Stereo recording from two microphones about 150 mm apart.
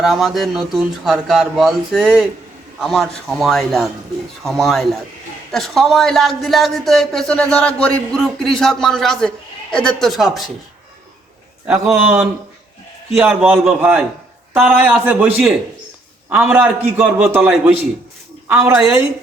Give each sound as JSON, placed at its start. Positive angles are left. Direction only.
{"t": 0.0, "sound": "speech", "side_deg": 0}
{"t": 11.6, "sound": "a man's voice", "side_deg": -10}
{"t": 14.6, "sound": "a man's voice", "side_deg": -10}